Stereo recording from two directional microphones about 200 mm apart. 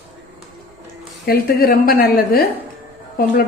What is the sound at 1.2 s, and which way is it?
A woman's voice, 50° left (ahead or behind).